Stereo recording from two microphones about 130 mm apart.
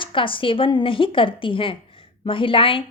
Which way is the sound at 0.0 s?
40° left (ahead or behind).